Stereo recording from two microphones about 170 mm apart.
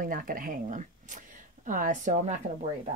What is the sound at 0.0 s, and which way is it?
Speech, 55° right (ahead or behind).